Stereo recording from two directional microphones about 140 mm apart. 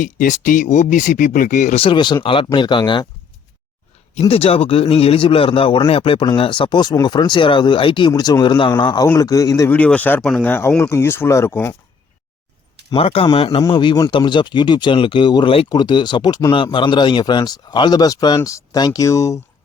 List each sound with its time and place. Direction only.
0.0 s speech: 70° left (ahead or behind)
1.7 s a man's voice: 40° left (ahead or behind)
4.1 s a man's voice: 45° left (ahead or behind); by 9.7 s 25° left (ahead or behind)
9.7 s speech: 10° left (ahead or behind)
12.9 s a man's voice: 40° left (ahead or behind); by 19.4 s 20° left (ahead or behind)